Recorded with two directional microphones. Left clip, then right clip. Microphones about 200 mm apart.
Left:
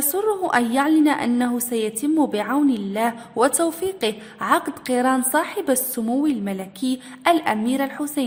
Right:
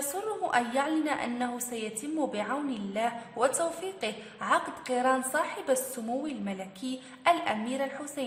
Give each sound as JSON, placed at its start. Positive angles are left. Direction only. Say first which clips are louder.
{"t": 0.1, "sound": "a woman's voice", "louder": "left 9 dB", "side_deg": 45}